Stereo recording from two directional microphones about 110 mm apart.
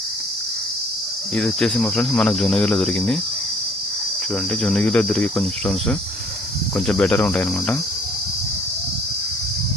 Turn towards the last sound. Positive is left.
turn(degrees=10)  # may be behind; listen again after turning